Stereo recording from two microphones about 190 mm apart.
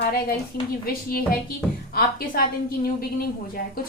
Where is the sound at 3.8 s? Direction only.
50° left (ahead or behind).